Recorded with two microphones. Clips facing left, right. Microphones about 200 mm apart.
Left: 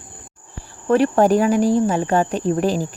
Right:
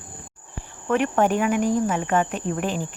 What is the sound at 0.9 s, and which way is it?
Cricket, 35° left (ahead or behind).